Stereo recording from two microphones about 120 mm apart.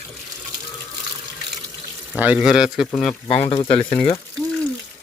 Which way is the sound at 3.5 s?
50° left (ahead or behind).